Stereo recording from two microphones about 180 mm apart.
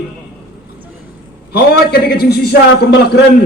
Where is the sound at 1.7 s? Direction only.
60° left (ahead or behind).